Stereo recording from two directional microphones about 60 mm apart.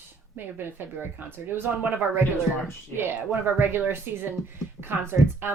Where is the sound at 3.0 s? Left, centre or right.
Right.